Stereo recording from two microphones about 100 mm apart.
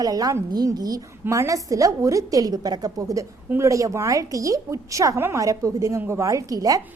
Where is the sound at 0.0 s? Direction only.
35° right (ahead or behind).